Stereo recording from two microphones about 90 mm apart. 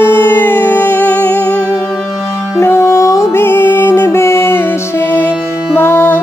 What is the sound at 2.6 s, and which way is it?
Music, 30° left (ahead or behind).